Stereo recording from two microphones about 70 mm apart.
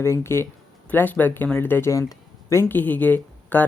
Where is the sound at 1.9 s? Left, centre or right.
Left.